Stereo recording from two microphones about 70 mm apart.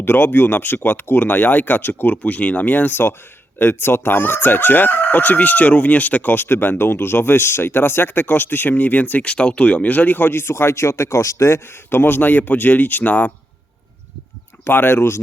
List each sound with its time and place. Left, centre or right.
0.0 s chicken: left
11.9 s chicken: left
14.6 s speech: left